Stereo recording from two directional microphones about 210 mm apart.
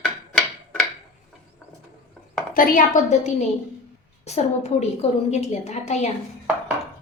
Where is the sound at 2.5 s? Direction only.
40° left (ahead or behind).